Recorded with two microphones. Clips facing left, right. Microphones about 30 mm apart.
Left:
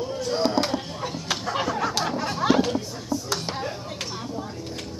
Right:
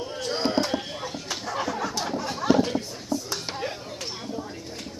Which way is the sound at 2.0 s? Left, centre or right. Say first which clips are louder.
Left 3 dB; left.